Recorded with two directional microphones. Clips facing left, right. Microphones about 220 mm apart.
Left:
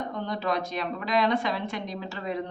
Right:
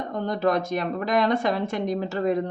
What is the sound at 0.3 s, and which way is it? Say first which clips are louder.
A woman's voice: right 8 dB; 50° right (ahead or behind).